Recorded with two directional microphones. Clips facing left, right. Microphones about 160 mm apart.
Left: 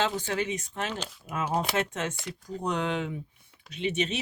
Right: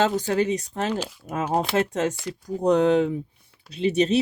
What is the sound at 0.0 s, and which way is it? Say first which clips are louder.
Speech: right 7 dB; 40° right (ahead or behind).